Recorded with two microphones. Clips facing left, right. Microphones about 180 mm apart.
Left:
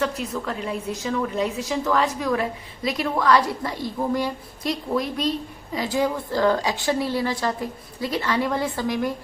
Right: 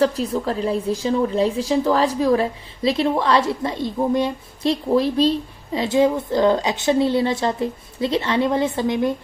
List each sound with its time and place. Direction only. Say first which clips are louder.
0.0 s a woman's voice: right 7 dB; 30° right (ahead or behind)